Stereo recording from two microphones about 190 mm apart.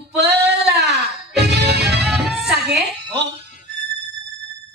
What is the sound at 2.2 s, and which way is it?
Music, centre (ahead or behind).